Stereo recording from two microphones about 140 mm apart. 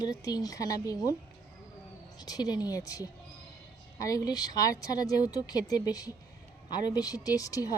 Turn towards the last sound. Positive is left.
turn(degrees=25)  # may be behind; listen again after turning